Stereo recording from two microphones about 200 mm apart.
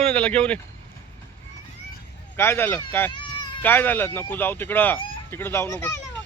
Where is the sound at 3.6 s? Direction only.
10° left (ahead or behind).